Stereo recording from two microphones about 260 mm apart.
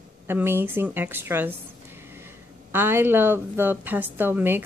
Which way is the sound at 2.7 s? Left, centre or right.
Centre.